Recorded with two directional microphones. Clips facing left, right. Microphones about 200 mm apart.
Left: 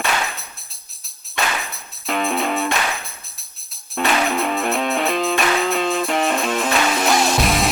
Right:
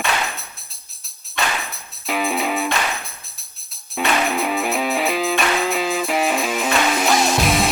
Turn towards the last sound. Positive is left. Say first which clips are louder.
# even
turn(degrees=0)  # may be behind; listen again after turning